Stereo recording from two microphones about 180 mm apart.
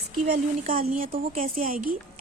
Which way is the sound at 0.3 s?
50° right (ahead or behind).